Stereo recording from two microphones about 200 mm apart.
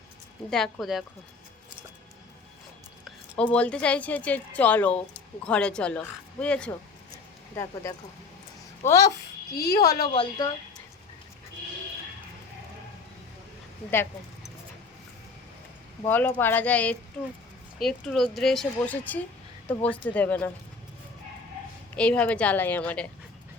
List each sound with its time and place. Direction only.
0.5 s speech: centre (ahead or behind)
3.0 s a woman's voice: 5° left (ahead or behind)
9.5 s speech: 50° left (ahead or behind)
10.2 s a woman's voice: 20° left (ahead or behind)
16.0 s a woman's voice: 10° left (ahead or behind)
21.9 s a woman's voice: 5° left (ahead or behind)